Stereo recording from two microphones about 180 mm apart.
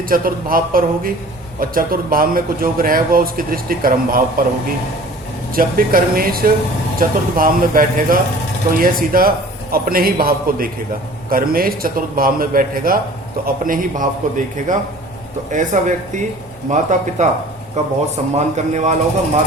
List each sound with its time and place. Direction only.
0.1 s speech: 50° right (ahead or behind)
5.5 s speech: 55° right (ahead or behind)